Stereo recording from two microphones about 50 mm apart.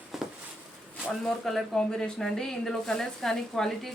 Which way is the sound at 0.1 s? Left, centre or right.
Centre.